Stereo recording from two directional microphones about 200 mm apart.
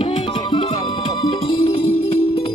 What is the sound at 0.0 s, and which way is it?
Music, 25° left (ahead or behind).